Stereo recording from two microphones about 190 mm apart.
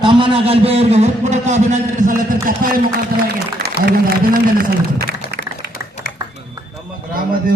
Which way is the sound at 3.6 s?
55° right (ahead or behind).